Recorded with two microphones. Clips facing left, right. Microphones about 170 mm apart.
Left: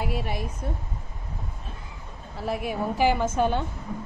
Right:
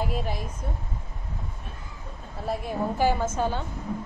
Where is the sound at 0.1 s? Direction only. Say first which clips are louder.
Left 1 dB; 70° left (ahead or behind).